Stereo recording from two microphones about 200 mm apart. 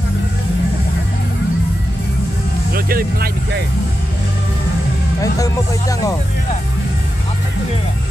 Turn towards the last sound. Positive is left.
turn(degrees=15)  # may be behind; listen again after turning